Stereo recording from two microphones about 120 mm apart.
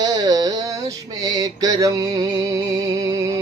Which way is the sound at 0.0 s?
35° right (ahead or behind).